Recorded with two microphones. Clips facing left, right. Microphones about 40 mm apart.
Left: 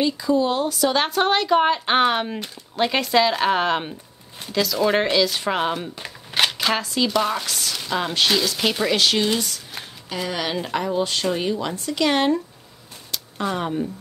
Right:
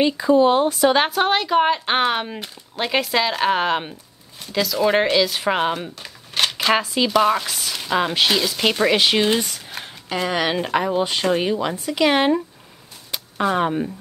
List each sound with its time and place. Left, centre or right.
0.0 s speech: right
0.9 s speech: centre
5.9 s a sound: centre
6.7 s speech: centre
8.8 s speech: centre
13.1 s a sound: right